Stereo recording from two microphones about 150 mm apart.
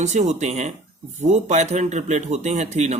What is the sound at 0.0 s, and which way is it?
A man's voice, 50° right (ahead or behind).